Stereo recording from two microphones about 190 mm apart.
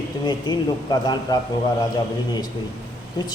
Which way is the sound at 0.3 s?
20° left (ahead or behind).